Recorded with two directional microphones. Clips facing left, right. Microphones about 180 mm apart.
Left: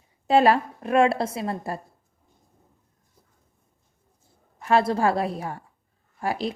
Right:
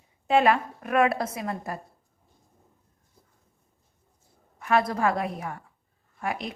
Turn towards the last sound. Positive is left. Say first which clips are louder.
# left 4 dB
turn(degrees=30)  # may be behind; listen again after turning